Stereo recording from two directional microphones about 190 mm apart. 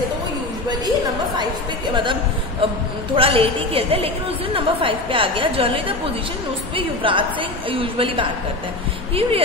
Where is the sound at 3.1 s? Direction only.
30° right (ahead or behind).